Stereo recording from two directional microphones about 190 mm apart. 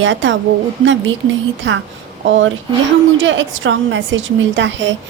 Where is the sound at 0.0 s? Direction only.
75° right (ahead or behind).